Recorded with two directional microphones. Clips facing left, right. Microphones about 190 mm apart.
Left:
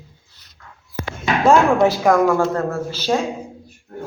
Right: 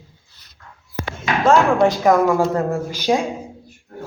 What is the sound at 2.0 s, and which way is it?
Speech, centre (ahead or behind).